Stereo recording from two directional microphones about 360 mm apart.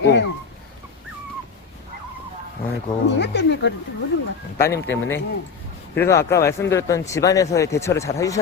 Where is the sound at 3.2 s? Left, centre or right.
Left.